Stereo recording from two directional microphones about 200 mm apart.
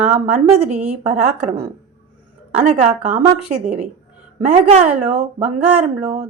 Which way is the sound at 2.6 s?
35° right (ahead or behind).